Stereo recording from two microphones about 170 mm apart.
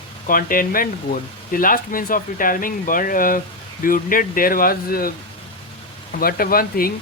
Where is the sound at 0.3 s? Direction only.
55° left (ahead or behind).